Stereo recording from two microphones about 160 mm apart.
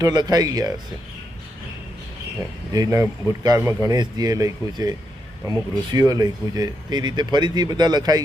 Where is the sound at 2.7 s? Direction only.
20° right (ahead or behind).